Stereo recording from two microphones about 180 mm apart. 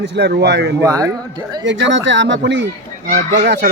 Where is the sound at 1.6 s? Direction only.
85° right.